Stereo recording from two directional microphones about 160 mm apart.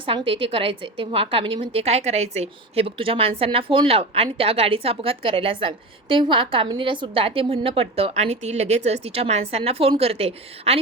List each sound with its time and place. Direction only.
0.0 s a woman's voice: 35° right (ahead or behind)